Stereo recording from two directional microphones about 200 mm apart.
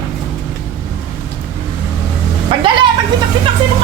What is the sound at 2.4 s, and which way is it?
Speech, 25° right (ahead or behind).